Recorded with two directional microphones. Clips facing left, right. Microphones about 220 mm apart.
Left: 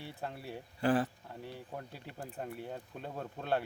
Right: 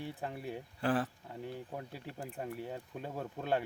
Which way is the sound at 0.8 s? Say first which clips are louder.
Left 3 dB; centre (ahead or behind).